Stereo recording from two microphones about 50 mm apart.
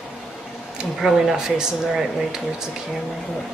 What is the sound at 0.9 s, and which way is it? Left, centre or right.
Speech, centre.